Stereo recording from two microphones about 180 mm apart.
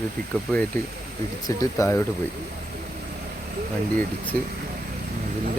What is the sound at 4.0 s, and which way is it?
Speech, 10° left (ahead or behind).